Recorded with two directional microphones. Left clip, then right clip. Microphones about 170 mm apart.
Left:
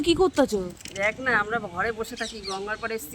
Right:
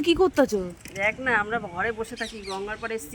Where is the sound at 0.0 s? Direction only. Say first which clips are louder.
Right 1 dB; centre (ahead or behind).